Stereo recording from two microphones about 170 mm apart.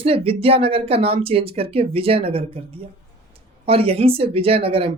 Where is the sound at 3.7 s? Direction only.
35° right (ahead or behind).